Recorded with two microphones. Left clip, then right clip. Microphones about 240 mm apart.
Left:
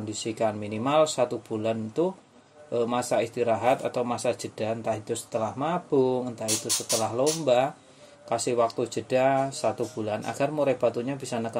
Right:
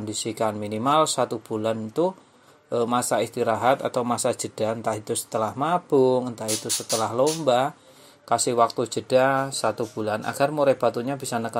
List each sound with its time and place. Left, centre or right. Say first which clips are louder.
0.1 s speech: right 2 dB; right